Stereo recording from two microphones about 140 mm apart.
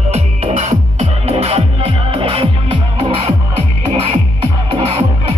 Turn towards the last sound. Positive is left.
turn(degrees=-45)  # may be behind; listen again after turning